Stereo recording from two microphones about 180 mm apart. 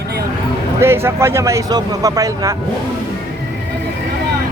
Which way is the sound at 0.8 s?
15° right (ahead or behind).